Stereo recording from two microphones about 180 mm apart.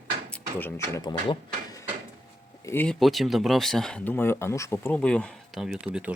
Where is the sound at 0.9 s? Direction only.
20° left (ahead or behind).